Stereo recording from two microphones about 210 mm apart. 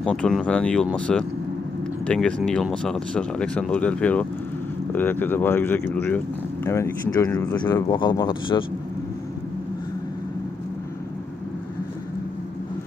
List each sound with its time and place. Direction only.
0.0 s speech: 5° left (ahead or behind)
7.5 s speech: 20° left (ahead or behind)